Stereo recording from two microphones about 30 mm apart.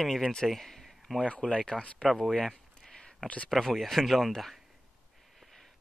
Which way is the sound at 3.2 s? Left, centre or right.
Left.